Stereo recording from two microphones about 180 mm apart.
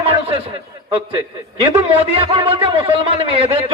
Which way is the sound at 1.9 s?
30° right (ahead or behind).